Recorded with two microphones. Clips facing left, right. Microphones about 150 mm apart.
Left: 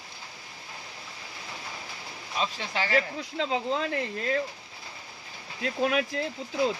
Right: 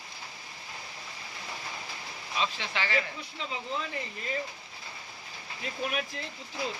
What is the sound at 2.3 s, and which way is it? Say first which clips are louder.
Speech: left 2 dB; 40° left (ahead or behind).